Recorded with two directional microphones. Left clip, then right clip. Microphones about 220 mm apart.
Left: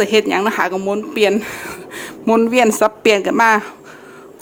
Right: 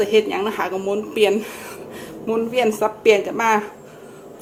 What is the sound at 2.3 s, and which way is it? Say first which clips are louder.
A woman's voice: left 6 dB; 45° left (ahead or behind).